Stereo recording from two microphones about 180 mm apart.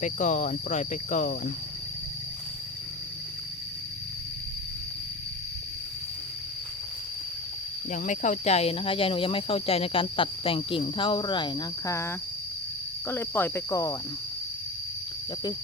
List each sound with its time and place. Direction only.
0.0 s speech: 45° left (ahead or behind)
7.9 s speech: 45° left (ahead or behind); by 13.9 s 20° left (ahead or behind)